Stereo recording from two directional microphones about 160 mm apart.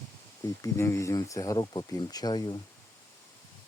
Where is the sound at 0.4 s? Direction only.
20° left (ahead or behind).